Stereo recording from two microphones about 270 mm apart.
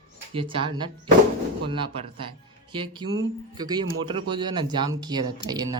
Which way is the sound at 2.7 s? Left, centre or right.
Centre.